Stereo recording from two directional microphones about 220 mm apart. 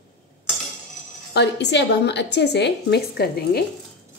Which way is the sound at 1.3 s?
50° left (ahead or behind).